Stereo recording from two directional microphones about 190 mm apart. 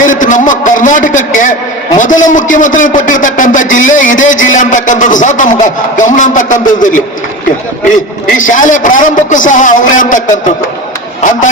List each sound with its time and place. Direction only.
0.0 s a sound: 45° left (ahead or behind)
2.0 s a man's voice: 40° left (ahead or behind)
8.3 s a man's voice: 45° left (ahead or behind)